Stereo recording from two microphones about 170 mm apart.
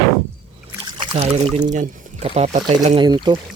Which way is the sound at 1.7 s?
45° right (ahead or behind).